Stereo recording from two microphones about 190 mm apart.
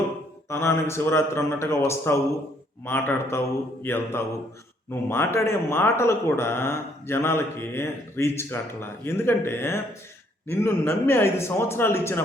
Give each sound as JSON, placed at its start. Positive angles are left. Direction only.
{"t": 0.4, "sound": "speech", "side_deg": 15}